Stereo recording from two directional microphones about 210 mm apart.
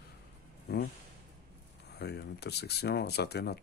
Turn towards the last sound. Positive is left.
turn(degrees=50)  # may be behind; listen again after turning